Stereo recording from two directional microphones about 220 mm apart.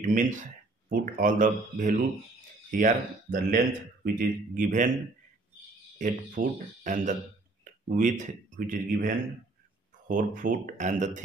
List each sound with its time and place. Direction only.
0.0 s speech: 35° right (ahead or behind)
5.9 s speech: 35° right (ahead or behind)